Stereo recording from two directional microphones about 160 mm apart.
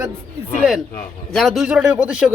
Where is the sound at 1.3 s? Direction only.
Centre (ahead or behind).